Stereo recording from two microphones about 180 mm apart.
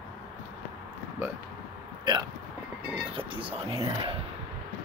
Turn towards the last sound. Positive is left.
turn(degrees=-30)  # may be behind; listen again after turning